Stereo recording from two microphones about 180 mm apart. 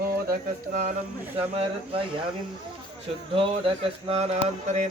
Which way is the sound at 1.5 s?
30° right (ahead or behind).